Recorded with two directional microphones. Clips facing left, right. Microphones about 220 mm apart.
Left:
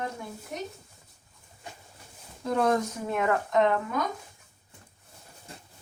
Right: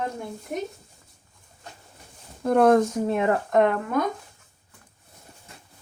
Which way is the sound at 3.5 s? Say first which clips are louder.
Right 4 dB; 55° right (ahead or behind).